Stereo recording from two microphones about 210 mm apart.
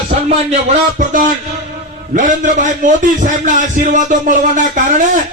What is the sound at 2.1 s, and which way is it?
A man's voice, 35° right (ahead or behind).